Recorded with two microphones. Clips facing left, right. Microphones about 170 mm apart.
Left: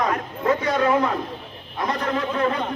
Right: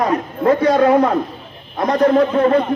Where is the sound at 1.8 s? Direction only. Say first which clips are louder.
Right 11 dB; 60° right (ahead or behind).